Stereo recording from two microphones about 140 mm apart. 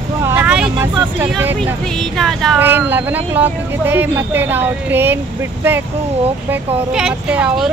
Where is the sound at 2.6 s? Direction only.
15° right (ahead or behind).